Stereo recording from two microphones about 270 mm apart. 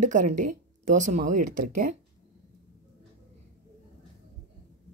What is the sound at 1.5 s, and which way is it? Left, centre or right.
Speech, right.